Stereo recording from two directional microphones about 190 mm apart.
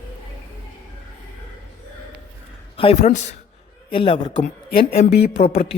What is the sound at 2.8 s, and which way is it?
Speech, 35° left (ahead or behind).